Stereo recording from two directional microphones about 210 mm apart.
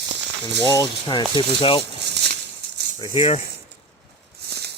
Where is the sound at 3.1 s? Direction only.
30° left (ahead or behind).